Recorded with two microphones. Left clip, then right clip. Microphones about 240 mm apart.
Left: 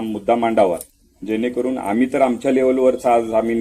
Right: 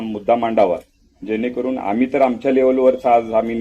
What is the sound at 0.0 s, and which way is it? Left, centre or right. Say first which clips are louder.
Speech: right 1 dB; left.